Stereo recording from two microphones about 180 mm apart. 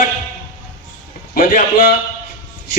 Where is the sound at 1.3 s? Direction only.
50° left (ahead or behind).